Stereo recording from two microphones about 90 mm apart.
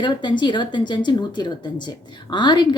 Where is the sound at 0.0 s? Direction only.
60° left (ahead or behind).